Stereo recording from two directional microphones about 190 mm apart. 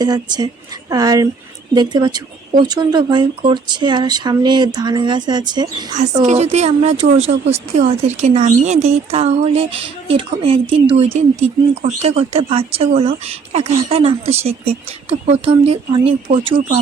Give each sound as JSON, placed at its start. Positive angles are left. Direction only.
{"t": 0.0, "sound": "speech", "side_deg": -20}
{"t": 6.2, "sound": "a woman's voice", "side_deg": -35}